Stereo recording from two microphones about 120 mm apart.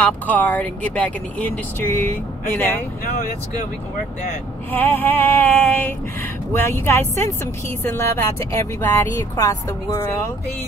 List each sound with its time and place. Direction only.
0.0 s speech: 15° left (ahead or behind)
4.7 s speech: 15° left (ahead or behind)